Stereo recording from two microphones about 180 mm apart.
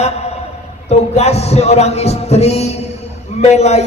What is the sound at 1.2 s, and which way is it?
A man's voice, 35° left (ahead or behind).